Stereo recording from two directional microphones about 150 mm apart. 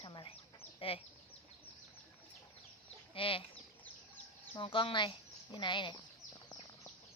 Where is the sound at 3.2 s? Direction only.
35° left (ahead or behind).